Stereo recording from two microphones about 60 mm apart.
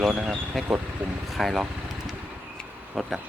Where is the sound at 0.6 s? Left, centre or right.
Centre.